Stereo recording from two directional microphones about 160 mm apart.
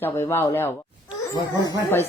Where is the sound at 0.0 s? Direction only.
15° left (ahead or behind).